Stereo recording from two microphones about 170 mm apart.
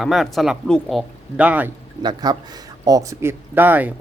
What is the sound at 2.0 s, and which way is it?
Speech, 25° right (ahead or behind).